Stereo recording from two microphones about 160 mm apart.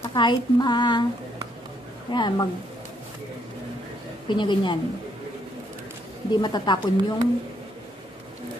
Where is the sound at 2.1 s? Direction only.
30° left (ahead or behind).